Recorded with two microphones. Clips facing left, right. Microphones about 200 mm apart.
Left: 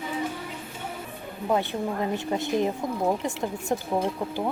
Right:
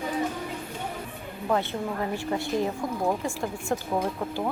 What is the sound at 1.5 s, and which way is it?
A woman's voice, 15° left (ahead or behind).